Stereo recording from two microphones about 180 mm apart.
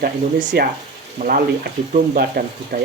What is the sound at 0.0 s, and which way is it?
Speech, 75° right (ahead or behind).